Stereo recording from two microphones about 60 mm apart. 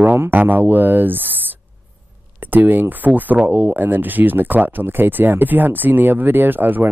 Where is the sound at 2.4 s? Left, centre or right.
Right.